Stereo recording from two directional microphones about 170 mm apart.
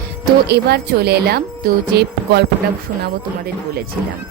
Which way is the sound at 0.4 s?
70° right (ahead or behind).